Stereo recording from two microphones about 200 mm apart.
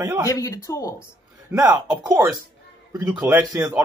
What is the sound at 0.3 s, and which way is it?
Speech, 15° left (ahead or behind).